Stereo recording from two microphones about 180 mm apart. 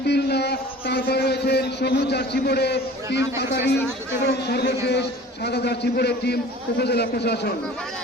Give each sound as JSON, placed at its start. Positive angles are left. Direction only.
{"t": 0.0, "sound": "a man's voice", "side_deg": 65}